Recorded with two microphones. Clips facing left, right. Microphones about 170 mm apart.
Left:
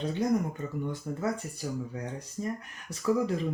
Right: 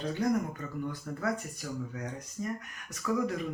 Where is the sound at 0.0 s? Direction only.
25° left (ahead or behind).